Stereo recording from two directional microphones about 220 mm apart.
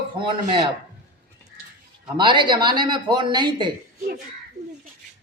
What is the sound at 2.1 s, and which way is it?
Speech, 20° right (ahead or behind).